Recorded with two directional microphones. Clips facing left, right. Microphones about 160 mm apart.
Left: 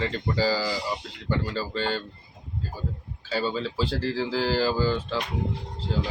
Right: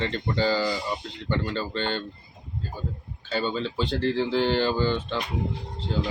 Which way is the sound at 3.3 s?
5° left (ahead or behind).